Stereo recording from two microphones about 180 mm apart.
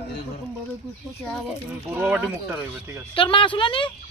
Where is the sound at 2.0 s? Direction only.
10° right (ahead or behind).